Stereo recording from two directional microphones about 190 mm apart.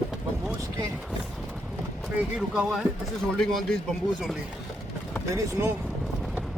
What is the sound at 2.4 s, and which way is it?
Speech, 5° right (ahead or behind).